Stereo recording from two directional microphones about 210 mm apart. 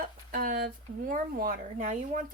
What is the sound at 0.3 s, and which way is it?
Speech, 45° right (ahead or behind).